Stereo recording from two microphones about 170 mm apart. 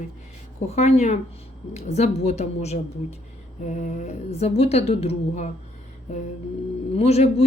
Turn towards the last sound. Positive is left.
turn(degrees=40)  # may be behind; listen again after turning